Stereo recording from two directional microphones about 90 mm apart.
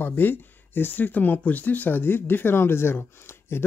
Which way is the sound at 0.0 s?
20° left (ahead or behind).